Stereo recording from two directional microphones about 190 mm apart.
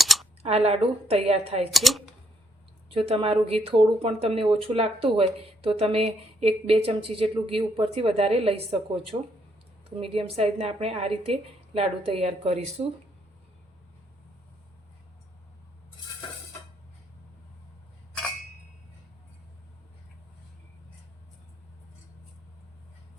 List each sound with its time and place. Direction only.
0.0 s a sound: centre (ahead or behind)
0.4 s a woman's voice: 30° right (ahead or behind)
1.7 s speech: centre (ahead or behind)
3.1 s a woman's voice: 30° right (ahead or behind)